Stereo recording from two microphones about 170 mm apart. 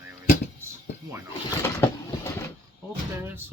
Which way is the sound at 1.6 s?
15° left (ahead or behind).